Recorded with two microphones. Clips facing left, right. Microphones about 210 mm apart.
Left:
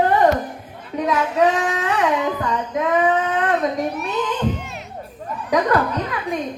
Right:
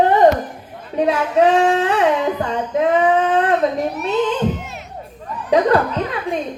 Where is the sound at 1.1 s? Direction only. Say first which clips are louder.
Right 3 dB; 30° right (ahead or behind).